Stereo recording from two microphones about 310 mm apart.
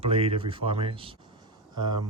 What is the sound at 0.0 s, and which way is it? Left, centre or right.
Speech, centre.